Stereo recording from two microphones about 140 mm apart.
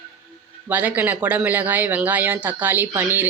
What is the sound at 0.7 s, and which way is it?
Speech, 10° right (ahead or behind).